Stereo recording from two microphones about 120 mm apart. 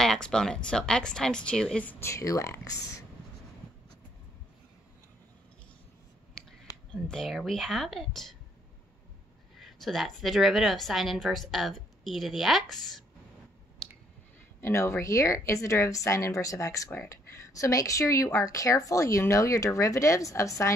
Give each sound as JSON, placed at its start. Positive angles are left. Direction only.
{"t": 0.0, "sound": "a woman's voice", "side_deg": 5}
{"t": 6.4, "sound": "a sound", "side_deg": 5}
{"t": 6.9, "sound": "a woman's voice", "side_deg": 5}
{"t": 9.6, "sound": "a woman's voice", "side_deg": 0}
{"t": 14.6, "sound": "a woman's voice", "side_deg": 25}